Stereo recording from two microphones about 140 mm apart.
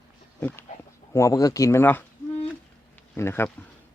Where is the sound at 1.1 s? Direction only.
25° left (ahead or behind).